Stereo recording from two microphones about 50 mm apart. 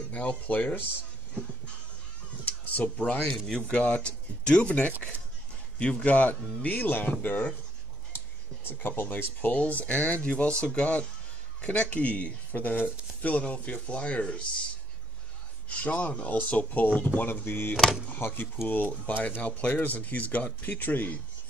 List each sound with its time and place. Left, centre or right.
0.1 s speech: left
2.4 s a sound: left
3.4 s speech: centre; by 7.4 s left
8.8 s speech: left
9.1 s speech: left
15.7 s speech: left
17.3 s speech: left